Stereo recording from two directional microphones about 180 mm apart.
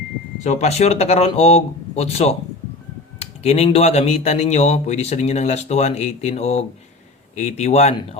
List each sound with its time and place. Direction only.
0.4 s speech: 35° left (ahead or behind)